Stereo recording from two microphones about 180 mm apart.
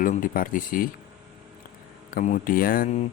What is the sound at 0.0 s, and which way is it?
Speech, 50° left (ahead or behind).